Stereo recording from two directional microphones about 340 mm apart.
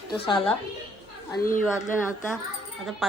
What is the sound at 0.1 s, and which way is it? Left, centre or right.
Speech, centre.